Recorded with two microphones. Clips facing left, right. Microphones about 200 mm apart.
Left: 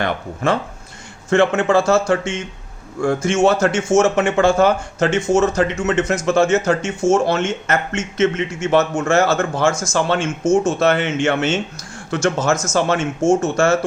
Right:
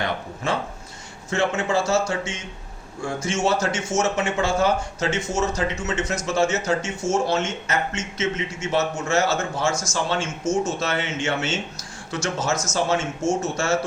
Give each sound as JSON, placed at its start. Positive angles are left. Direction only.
{"t": 1.3, "sound": "speech", "side_deg": 55}